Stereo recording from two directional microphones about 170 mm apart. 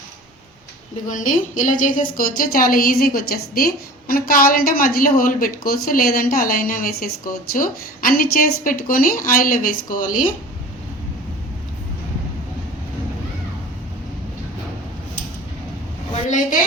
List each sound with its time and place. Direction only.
1.0 s a woman's voice: 50° left (ahead or behind)